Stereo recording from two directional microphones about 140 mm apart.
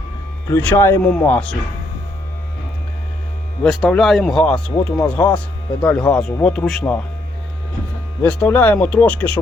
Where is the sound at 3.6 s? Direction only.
Centre (ahead or behind).